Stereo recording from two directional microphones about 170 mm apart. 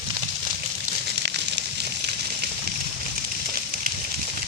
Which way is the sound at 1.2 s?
90° right.